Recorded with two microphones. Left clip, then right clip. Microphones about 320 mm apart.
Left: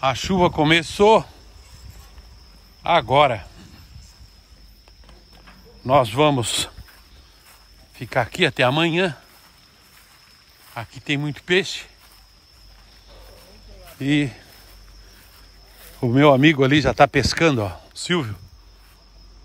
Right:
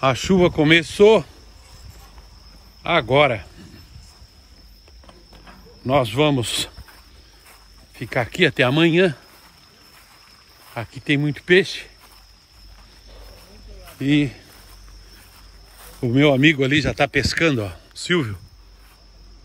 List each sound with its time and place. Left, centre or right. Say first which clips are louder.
0.0 s speech: right 2 dB; centre
2.8 s speech: left 1 dB; centre
5.9 s speech: left 2 dB; centre
8.0 s speech: right 1 dB; centre
10.7 s speech: right 3 dB; centre
14.0 s speech: right 2 dB; left
16.0 s speech: left 2 dB; centre